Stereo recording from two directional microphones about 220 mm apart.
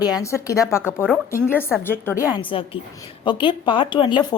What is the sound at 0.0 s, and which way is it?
Speech, 15° left (ahead or behind).